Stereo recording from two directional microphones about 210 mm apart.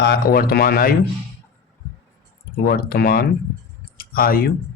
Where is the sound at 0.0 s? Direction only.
45° left (ahead or behind).